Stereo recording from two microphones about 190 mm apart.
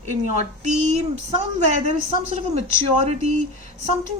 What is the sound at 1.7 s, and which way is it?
Speech, 35° right (ahead or behind).